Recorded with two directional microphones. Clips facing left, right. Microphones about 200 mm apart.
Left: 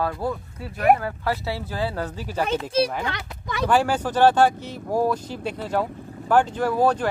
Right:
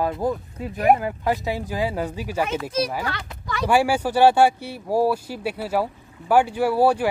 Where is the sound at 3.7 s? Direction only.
10° right (ahead or behind).